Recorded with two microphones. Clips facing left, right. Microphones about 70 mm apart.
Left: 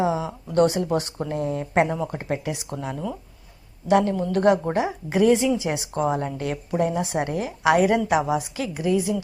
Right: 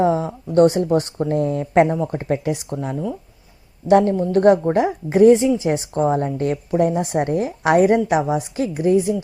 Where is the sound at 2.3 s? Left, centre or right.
Right.